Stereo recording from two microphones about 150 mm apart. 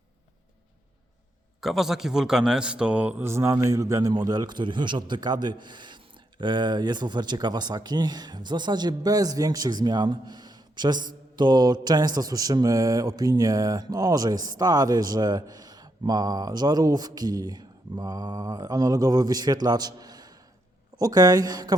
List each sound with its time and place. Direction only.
1.6 s speech: centre (ahead or behind); by 21.8 s 25° right (ahead or behind)